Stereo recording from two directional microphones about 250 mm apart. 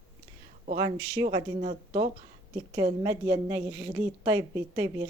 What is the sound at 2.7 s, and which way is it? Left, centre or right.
A woman's voice, centre.